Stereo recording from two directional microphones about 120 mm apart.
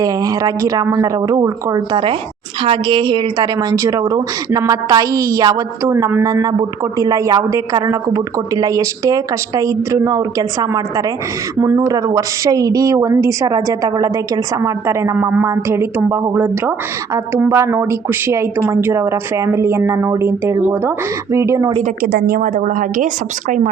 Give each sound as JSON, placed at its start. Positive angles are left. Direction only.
{"t": 0.0, "sound": "a woman's voice", "side_deg": -30}
{"t": 5.9, "sound": "a woman's voice", "side_deg": -20}
{"t": 21.3, "sound": "a woman's voice", "side_deg": -25}
{"t": 22.4, "sound": "a woman's voice", "side_deg": -90}